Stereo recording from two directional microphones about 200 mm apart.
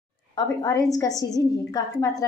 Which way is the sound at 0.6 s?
15° left (ahead or behind).